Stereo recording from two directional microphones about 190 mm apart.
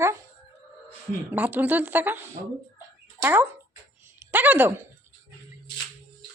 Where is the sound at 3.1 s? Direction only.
10° right (ahead or behind).